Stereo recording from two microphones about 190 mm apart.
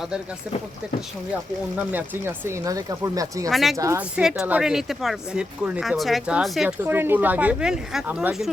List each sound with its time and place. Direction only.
1.7 s speech: 10° right (ahead or behind)
3.5 s speech: centre (ahead or behind)
3.8 s speech: 15° right (ahead or behind)
4.2 s speech: 5° right (ahead or behind)